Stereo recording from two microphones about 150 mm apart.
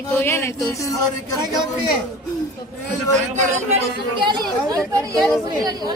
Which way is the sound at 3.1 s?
50° right (ahead or behind).